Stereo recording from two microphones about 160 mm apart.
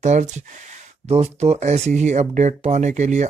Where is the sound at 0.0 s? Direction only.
45° right (ahead or behind).